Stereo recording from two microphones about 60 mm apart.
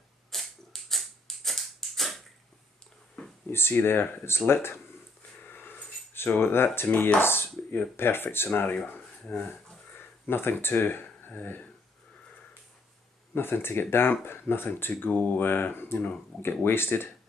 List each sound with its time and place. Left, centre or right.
0.3 s a sound: centre
3.5 s speech: left
5.4 s a sound: left
7.2 s speech: left
7.4 s speech: left
7.9 s speech: left
9.3 s speech: centre
10.2 s speech: left
13.3 s speech: left